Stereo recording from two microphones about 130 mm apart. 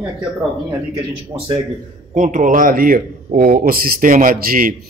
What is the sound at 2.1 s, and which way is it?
A man's voice, 80° right.